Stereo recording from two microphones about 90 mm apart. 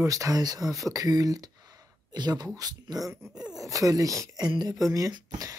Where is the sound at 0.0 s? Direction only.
40° right (ahead or behind).